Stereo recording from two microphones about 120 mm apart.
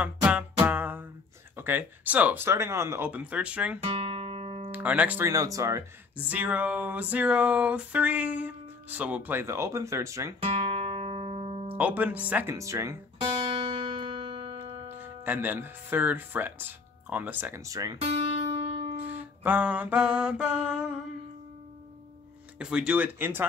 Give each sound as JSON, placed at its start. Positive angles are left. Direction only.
{"t": 0.0, "sound": "music", "side_deg": -10}
{"t": 1.6, "sound": "a sound", "side_deg": -15}
{"t": 3.8, "sound": "guitar", "side_deg": -55}
{"t": 4.6, "sound": "speech", "side_deg": -15}
{"t": 5.2, "sound": "speech", "side_deg": -25}
{"t": 6.1, "sound": "a sound", "side_deg": -15}
{"t": 10.4, "sound": "music", "side_deg": -55}
{"t": 11.7, "sound": "a sound", "side_deg": -15}
{"t": 13.2, "sound": "music", "side_deg": -55}
{"t": 15.0, "sound": "speech", "side_deg": -15}
{"t": 18.5, "sound": "music", "side_deg": -50}
{"t": 18.9, "sound": "music", "side_deg": -15}
{"t": 22.6, "sound": "a sound", "side_deg": -5}